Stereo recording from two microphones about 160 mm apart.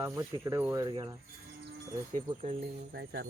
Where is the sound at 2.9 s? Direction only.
90° right.